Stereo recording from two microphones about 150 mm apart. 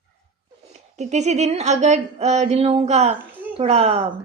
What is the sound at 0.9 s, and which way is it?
Speech, 50° right (ahead or behind).